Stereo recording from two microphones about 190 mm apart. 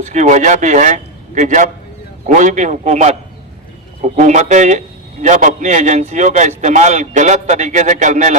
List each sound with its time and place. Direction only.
0.0 s a man's voice: 40° right (ahead or behind)